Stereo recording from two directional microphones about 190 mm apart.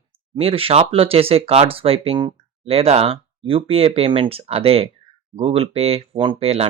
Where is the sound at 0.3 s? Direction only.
30° right (ahead or behind).